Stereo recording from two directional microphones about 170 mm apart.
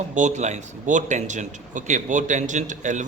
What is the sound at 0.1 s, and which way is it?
A man's voice, 45° right (ahead or behind).